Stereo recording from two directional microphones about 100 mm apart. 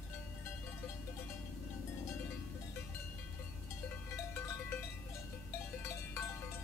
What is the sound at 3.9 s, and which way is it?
Cowbell, 20° left (ahead or behind).